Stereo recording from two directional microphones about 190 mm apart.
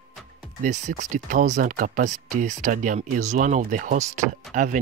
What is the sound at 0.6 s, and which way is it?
Speech, 40° right (ahead or behind).